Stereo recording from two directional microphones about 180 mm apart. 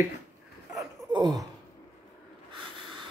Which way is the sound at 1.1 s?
20° right (ahead or behind).